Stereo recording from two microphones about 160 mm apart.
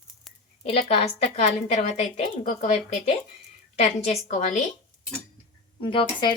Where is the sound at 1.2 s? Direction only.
45° left (ahead or behind).